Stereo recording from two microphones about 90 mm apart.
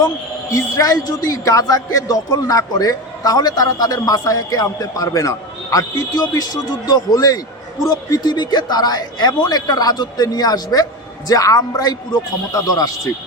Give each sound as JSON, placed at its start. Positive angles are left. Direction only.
{"t": 0.5, "sound": "speech", "side_deg": 45}